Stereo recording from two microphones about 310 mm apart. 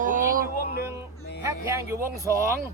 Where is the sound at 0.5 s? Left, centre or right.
Left.